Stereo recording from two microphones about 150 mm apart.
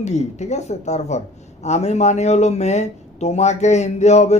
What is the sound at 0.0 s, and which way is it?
A man's voice, 50° left (ahead or behind).